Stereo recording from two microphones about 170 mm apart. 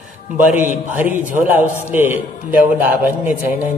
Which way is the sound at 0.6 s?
50° right (ahead or behind).